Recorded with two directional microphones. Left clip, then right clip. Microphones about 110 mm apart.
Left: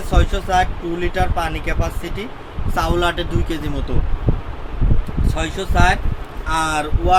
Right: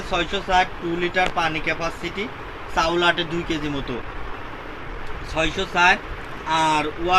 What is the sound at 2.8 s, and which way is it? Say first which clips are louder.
Speech: even; 5° left (ahead or behind).